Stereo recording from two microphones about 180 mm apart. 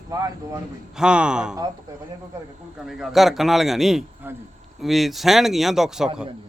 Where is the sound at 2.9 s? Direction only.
Centre (ahead or behind).